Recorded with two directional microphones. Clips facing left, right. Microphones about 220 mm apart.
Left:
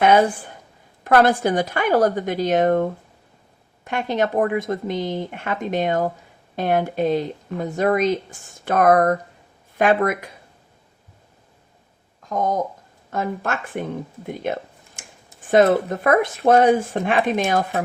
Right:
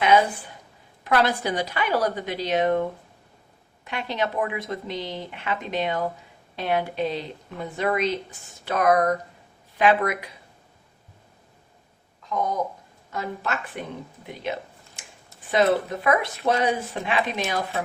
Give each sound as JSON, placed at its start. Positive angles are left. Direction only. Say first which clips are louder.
{"t": 0.0, "sound": "speech", "louder": "left 4 dB", "side_deg": 50}
{"t": 12.3, "sound": "speech", "louder": "left 4 dB", "side_deg": 45}
{"t": 14.3, "sound": "a sound", "louder": "left 4 dB", "side_deg": 50}
{"t": 15.4, "sound": "speech", "louder": "left 5 dB", "side_deg": 50}